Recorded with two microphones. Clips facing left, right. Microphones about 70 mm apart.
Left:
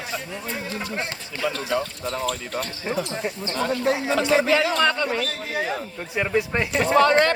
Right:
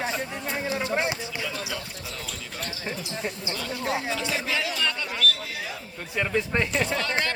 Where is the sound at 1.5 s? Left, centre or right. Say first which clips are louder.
Left 8 dB; left.